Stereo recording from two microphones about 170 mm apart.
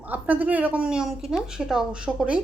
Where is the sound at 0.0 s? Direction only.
10° right (ahead or behind).